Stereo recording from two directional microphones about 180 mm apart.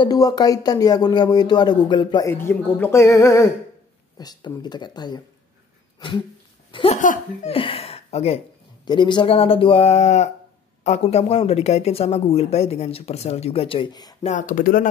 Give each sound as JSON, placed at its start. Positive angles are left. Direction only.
{"t": 0.0, "sound": "speech", "side_deg": 20}
{"t": 2.3, "sound": "speech", "side_deg": 15}
{"t": 7.0, "sound": "speech", "side_deg": 45}
{"t": 7.5, "sound": "speech", "side_deg": 30}
{"t": 14.2, "sound": "speech", "side_deg": 45}